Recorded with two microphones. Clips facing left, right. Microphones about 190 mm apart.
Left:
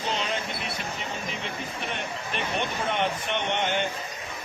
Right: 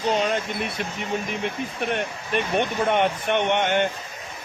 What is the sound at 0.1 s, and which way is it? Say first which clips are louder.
Speech: right 8 dB; 50° right (ahead or behind).